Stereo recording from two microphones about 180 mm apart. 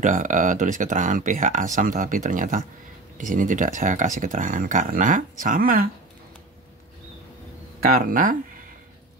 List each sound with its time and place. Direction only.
0.0 s speech: 45° right (ahead or behind)
7.8 s speech: 50° right (ahead or behind)